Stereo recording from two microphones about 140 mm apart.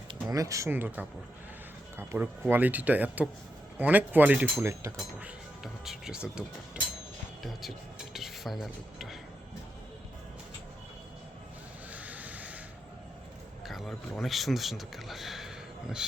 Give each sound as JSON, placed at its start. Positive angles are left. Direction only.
{"t": 0.1, "sound": "speech", "side_deg": -25}
{"t": 8.1, "sound": "cutlery", "side_deg": 0}
{"t": 11.9, "sound": "crow", "side_deg": -10}
{"t": 13.7, "sound": "a man's voice", "side_deg": 0}